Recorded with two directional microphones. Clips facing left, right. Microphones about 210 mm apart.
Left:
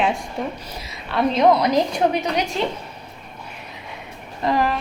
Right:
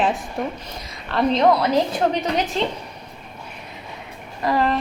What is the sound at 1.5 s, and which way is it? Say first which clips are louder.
Speech: left 3 dB; 15° left (ahead or behind).